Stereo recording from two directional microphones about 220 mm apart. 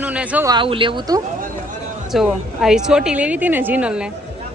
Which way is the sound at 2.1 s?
Centre (ahead or behind).